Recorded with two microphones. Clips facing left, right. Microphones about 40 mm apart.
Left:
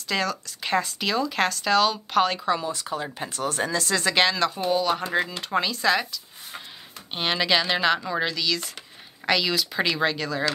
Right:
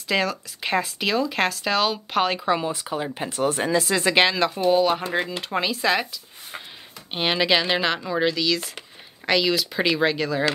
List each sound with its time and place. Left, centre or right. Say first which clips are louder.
0.1 s speech: right 3 dB; centre